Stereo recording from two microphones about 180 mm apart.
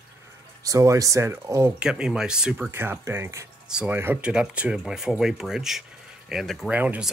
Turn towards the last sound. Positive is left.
turn(degrees=-5)  # may be behind; listen again after turning